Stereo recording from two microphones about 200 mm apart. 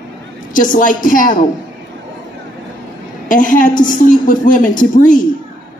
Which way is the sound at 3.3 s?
40° left (ahead or behind).